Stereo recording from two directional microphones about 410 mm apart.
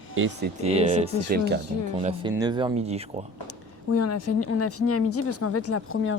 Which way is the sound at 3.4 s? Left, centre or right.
Left.